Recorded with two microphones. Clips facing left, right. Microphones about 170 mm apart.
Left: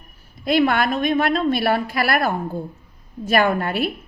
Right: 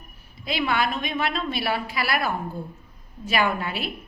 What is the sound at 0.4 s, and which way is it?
A woman's voice, 50° left (ahead or behind).